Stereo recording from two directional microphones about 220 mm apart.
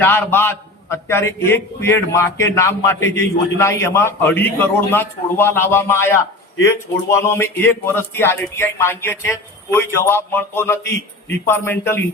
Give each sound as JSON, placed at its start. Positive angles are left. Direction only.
{"t": 0.0, "sound": "a man's voice", "side_deg": 10}